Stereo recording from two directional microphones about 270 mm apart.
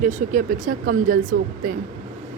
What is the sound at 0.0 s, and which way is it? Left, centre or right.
Speech, right.